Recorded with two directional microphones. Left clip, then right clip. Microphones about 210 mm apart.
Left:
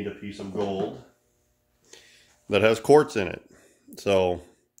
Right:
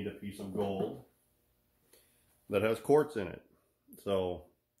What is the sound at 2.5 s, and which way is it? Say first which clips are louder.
Speech: left 10 dB; 45° left (ahead or behind).